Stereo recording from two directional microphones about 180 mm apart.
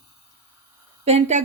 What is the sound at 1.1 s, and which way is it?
Speech, 35° right (ahead or behind).